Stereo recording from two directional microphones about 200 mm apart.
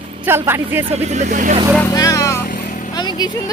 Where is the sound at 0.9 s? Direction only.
35° right (ahead or behind).